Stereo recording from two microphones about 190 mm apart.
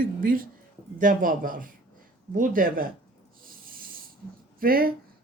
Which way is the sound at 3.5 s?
50° right (ahead or behind).